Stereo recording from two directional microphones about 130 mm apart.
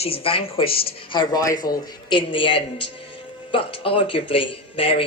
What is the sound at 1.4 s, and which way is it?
Speech, 25° left (ahead or behind).